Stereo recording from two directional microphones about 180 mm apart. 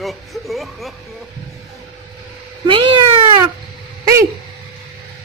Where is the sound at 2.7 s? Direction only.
30° right (ahead or behind).